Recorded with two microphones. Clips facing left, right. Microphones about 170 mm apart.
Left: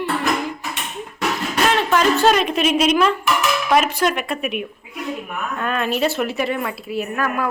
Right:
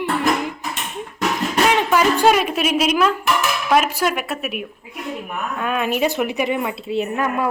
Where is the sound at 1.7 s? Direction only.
15° right (ahead or behind).